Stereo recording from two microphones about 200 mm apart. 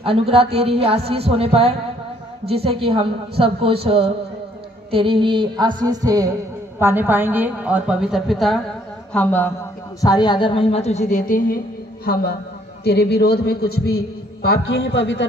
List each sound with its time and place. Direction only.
0.0 s a woman's voice: 30° right (ahead or behind); by 9.5 s 10° left (ahead or behind)
9.9 s a woman's voice: 20° left (ahead or behind); by 13.8 s 50° left (ahead or behind)
14.7 s a man's voice: 70° left (ahead or behind)